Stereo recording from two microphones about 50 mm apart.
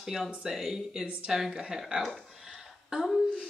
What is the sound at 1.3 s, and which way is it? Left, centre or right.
Speech, centre.